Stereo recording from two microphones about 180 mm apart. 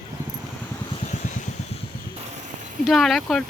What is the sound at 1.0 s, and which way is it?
Vehicle, 40° left (ahead or behind).